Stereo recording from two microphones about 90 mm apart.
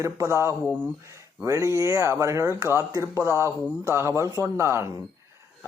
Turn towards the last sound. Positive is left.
turn(degrees=-30)  # may be behind; listen again after turning